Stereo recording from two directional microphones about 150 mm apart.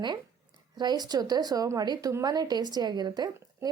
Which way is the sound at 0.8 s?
30° right (ahead or behind).